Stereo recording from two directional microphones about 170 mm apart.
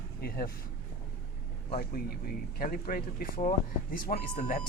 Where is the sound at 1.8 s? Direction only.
60° left (ahead or behind).